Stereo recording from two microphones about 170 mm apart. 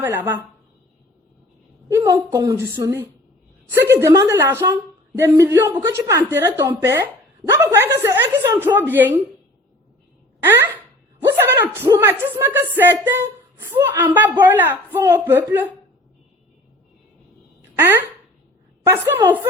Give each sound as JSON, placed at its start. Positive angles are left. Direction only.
{"t": 0.0, "sound": "speech", "side_deg": -15}
{"t": 1.9, "sound": "a woman's voice", "side_deg": -20}
{"t": 10.4, "sound": "speech", "side_deg": -10}
{"t": 17.7, "sound": "speech", "side_deg": -15}